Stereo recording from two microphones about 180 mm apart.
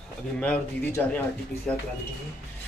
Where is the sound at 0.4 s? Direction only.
10° left (ahead or behind).